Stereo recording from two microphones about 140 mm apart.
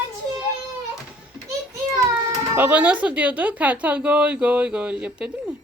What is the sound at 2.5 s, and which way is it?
Speech, 10° right (ahead or behind).